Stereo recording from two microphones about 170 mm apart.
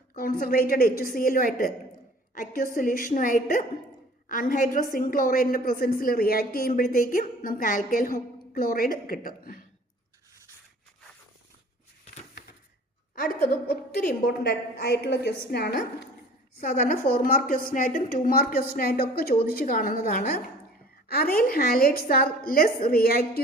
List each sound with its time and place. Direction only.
0.2 s a woman's voice: 60° left (ahead or behind)
13.1 s a woman's voice: 60° left (ahead or behind)
16.6 s a woman's voice: 55° left (ahead or behind)